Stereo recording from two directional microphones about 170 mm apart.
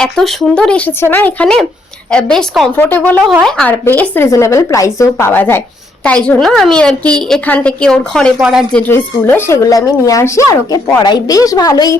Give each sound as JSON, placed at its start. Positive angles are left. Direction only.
{"t": 0.0, "sound": "a woman's voice", "side_deg": 5}
{"t": 8.9, "sound": "speech", "side_deg": 15}